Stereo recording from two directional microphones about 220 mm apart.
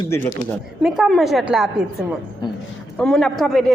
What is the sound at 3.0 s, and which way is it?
Speech, 5° left (ahead or behind).